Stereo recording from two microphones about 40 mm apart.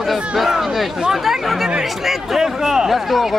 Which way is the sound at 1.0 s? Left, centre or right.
Centre.